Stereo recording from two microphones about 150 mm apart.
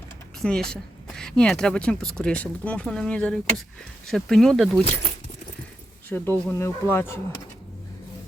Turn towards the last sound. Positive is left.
turn(degrees=15)  # may be behind; listen again after turning